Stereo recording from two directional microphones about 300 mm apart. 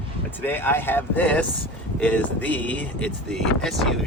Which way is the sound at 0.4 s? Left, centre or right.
Centre.